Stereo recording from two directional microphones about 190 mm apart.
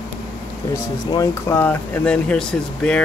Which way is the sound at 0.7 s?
15° left (ahead or behind).